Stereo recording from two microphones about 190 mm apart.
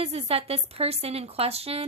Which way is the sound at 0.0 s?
30° right (ahead or behind).